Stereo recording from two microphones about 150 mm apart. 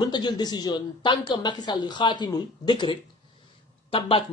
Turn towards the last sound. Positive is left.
turn(degrees=35)  # may be behind; listen again after turning